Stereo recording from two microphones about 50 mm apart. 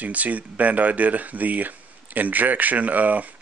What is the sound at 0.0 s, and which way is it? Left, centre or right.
Speech, right.